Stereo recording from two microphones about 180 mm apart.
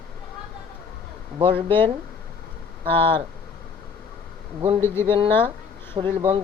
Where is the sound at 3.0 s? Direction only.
30° right (ahead or behind).